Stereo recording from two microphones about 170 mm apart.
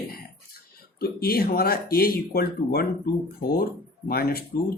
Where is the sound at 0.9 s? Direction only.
65° left (ahead or behind).